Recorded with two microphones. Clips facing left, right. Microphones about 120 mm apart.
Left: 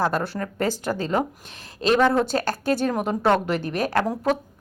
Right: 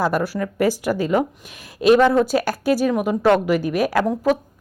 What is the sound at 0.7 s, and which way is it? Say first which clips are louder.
A woman's voice: right 5 dB; 10° right (ahead or behind).